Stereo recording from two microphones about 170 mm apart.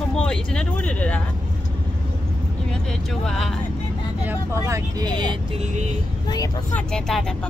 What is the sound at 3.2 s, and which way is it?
Speech, centre (ahead or behind).